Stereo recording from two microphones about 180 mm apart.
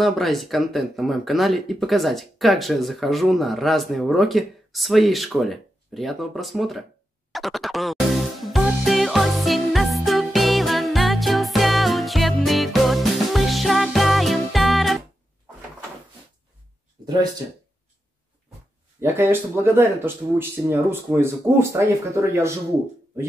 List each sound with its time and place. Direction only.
0.0 s speech: centre (ahead or behind)
7.3 s music: centre (ahead or behind)
17.0 s speech: 25° right (ahead or behind)
18.9 s speech: 10° right (ahead or behind)